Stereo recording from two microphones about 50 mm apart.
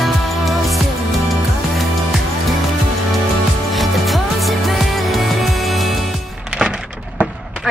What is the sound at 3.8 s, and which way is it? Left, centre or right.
Music, centre.